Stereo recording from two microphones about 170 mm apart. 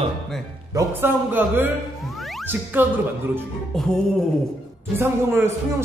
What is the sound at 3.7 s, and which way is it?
Speech, centre (ahead or behind).